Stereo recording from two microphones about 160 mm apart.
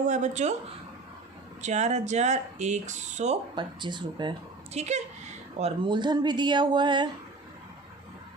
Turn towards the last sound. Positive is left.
turn(degrees=-30)  # may be behind; listen again after turning